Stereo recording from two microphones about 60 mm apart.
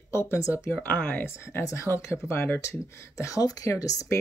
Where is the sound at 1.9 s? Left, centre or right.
Left.